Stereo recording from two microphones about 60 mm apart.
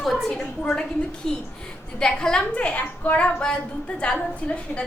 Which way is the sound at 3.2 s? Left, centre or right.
Centre.